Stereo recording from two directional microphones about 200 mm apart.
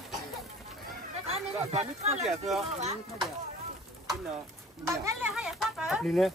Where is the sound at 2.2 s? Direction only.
Centre (ahead or behind).